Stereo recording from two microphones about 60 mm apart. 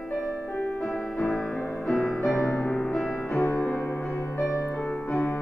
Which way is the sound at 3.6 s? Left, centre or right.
Left.